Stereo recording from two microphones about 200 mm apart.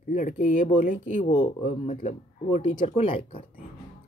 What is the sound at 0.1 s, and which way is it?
Speech, 40° left (ahead or behind).